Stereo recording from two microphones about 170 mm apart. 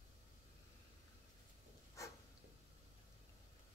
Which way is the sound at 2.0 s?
20° left (ahead or behind).